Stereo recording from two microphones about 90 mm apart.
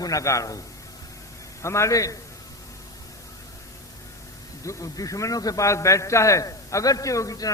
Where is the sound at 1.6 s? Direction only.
30° left (ahead or behind).